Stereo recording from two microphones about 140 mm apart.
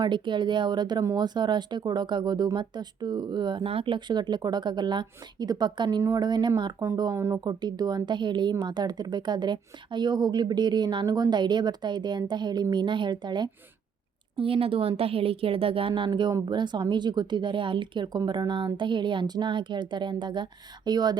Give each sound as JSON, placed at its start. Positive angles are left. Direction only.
{"t": 0.0, "sound": "a woman's voice", "side_deg": -35}